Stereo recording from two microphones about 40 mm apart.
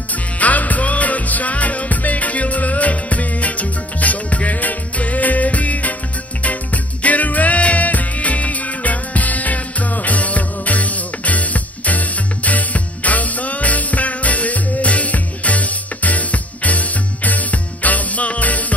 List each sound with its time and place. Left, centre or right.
0.1 s music: left